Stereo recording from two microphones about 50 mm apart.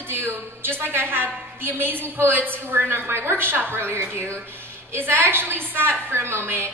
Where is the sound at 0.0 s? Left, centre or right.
Right.